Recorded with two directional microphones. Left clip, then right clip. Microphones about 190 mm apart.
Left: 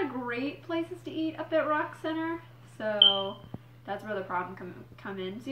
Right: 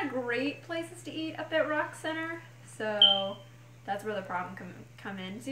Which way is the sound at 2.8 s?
15° right (ahead or behind).